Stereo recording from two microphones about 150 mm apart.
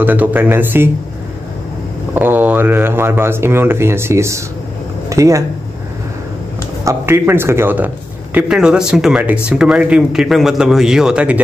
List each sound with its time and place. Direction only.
0.0 s speech: 10° right (ahead or behind)
2.1 s speech: 10° right (ahead or behind)
6.8 s a man's voice: 20° right (ahead or behind)